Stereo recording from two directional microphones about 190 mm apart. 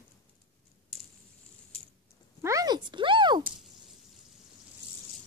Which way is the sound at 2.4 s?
20° right (ahead or behind).